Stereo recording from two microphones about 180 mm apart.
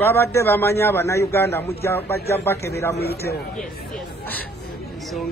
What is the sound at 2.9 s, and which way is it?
Speech, 60° left (ahead or behind).